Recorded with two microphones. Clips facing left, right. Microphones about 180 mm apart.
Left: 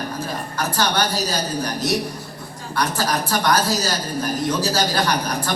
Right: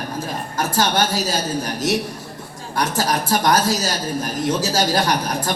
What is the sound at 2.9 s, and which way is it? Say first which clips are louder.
A woman's voice: right 2 dB; 45° right (ahead or behind).